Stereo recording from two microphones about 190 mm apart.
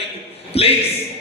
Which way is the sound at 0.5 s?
30° left (ahead or behind).